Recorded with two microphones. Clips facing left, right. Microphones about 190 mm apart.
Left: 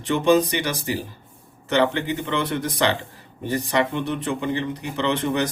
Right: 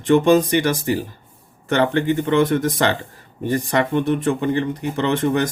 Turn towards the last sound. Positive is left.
turn(degrees=-50)  # may be behind; listen again after turning